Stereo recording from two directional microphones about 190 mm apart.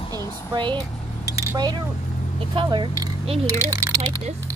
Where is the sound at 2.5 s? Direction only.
25° right (ahead or behind).